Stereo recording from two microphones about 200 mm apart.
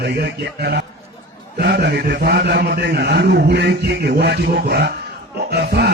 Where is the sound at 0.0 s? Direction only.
60° right (ahead or behind).